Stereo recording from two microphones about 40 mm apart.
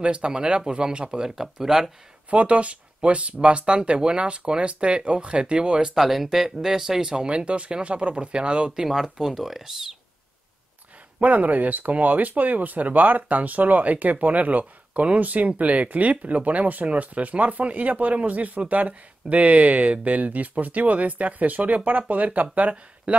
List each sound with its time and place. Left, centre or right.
0.0 s speech: right
1.3 s speech: centre
2.3 s speech: right
5.9 s speech: centre
7.1 s speech: right
8.7 s speech: centre
11.1 s speech: right